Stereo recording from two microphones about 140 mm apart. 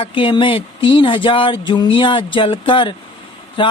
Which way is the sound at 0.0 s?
40° left (ahead or behind).